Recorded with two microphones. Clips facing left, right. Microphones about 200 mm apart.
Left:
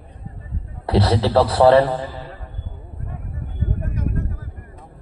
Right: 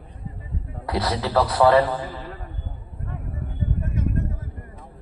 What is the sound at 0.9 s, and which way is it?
A man's voice, 30° left (ahead or behind).